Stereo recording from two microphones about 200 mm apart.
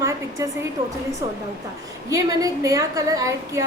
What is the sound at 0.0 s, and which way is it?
Hair dryer, 15° right (ahead or behind).